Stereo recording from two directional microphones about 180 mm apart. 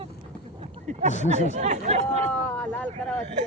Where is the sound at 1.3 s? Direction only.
40° right (ahead or behind).